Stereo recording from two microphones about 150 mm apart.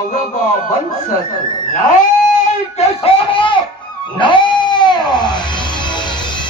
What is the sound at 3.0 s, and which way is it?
Speech, 35° left (ahead or behind).